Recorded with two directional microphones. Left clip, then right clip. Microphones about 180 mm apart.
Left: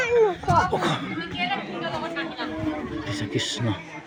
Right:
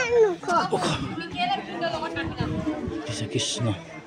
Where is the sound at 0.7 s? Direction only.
10° right (ahead or behind).